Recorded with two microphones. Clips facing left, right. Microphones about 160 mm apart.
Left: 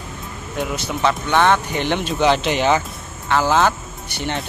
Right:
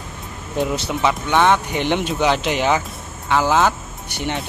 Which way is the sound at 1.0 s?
10° right (ahead or behind).